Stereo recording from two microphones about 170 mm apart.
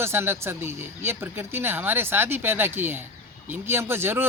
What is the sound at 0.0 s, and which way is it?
Speech, 15° right (ahead or behind).